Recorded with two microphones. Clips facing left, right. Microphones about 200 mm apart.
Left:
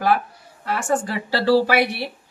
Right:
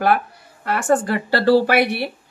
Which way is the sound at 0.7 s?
60° right (ahead or behind).